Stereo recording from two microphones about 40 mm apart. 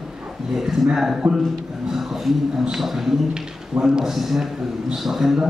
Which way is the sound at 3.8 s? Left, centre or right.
Centre.